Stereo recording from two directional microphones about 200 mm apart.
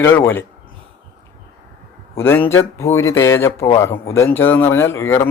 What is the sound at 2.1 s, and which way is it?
Speech, 10° left (ahead or behind).